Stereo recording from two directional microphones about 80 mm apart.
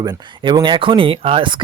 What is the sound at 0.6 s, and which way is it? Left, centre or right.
Speech, right.